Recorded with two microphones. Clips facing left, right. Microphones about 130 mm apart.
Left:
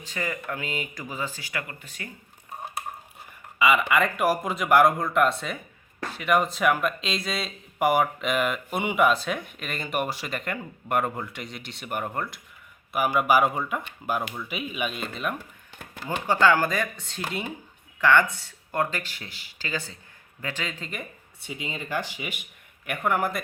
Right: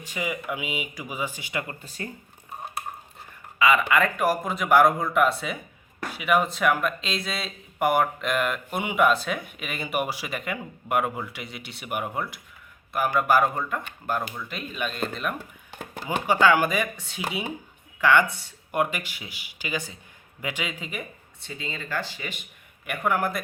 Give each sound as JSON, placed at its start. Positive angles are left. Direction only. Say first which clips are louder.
{"t": 0.0, "sound": "speech", "louder": "right 1 dB", "side_deg": -10}
{"t": 1.8, "sound": "speech", "louder": "right 5 dB", "side_deg": -35}
{"t": 3.6, "sound": "speech", "louder": "right 1 dB", "side_deg": 5}
{"t": 12.9, "sound": "speech", "louder": "even", "side_deg": 5}
{"t": 16.2, "sound": "speech", "louder": "right 1 dB", "side_deg": -10}
{"t": 21.4, "sound": "speech", "louder": "left 1 dB", "side_deg": 15}
{"t": 22.9, "sound": "speech", "louder": "even", "side_deg": 0}